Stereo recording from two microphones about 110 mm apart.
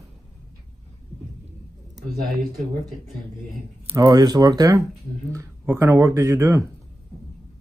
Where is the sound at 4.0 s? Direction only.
40° right (ahead or behind).